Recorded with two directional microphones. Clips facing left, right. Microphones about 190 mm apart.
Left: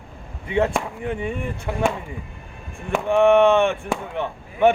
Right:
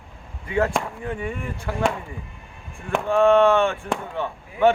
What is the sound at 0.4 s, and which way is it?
Speech, 25° left (ahead or behind).